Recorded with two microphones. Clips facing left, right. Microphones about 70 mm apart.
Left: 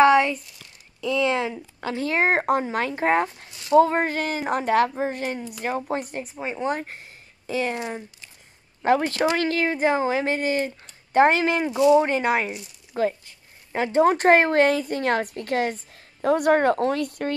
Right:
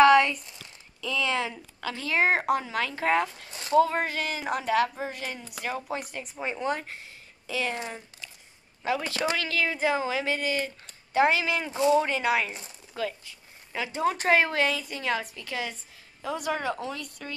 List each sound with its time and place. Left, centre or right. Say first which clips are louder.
0.0 s a sound: left 2 dB; left
1.0 s speech: left 6 dB; left
3.4 s a sound: right 3 dB; right
3.7 s speech: left 5 dB; left
6.2 s speech: left 2 dB; centre
6.7 s speech: left 3 dB; left
7.7 s speech: left 5 dB; left
8.8 s speech: left 9 dB; left
9.2 s speech: left 6 dB; left